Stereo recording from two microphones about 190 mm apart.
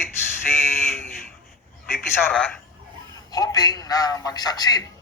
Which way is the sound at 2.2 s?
5° left (ahead or behind).